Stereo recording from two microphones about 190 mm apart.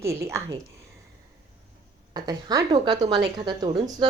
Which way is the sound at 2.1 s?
20° right (ahead or behind).